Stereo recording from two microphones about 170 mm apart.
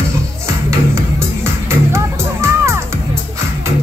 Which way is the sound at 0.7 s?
15° right (ahead or behind).